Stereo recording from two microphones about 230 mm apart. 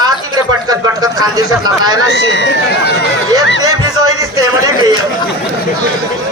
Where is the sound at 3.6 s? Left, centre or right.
Centre.